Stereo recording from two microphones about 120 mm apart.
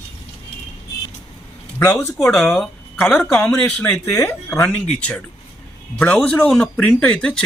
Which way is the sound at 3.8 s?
20° left (ahead or behind).